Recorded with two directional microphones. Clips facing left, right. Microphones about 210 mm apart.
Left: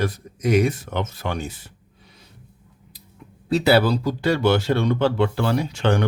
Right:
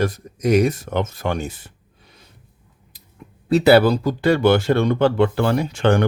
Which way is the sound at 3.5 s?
55° right (ahead or behind).